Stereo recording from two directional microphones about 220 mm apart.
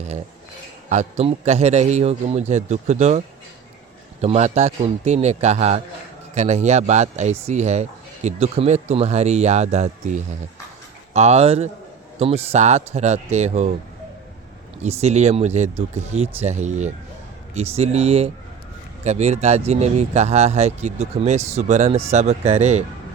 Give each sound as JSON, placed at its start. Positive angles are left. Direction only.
{"t": 0.9, "sound": "speech", "side_deg": -30}
{"t": 14.8, "sound": "speech", "side_deg": -30}